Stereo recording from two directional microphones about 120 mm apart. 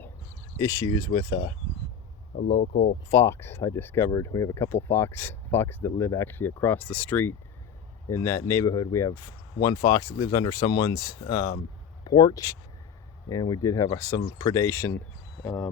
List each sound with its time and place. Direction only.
0.6 s speech: 30° left (ahead or behind)
3.1 s speech: 20° left (ahead or behind)
4.1 s speech: 30° left (ahead or behind)